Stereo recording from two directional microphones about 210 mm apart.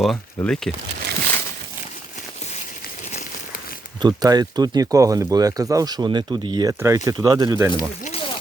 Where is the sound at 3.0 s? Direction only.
30° left (ahead or behind).